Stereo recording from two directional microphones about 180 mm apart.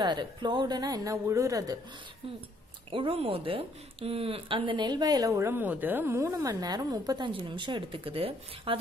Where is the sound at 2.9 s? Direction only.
30° right (ahead or behind).